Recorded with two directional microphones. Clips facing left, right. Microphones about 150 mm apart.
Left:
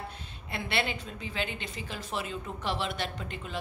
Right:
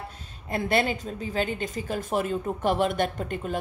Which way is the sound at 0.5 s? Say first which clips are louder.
Right 8 dB; 45° right (ahead or behind).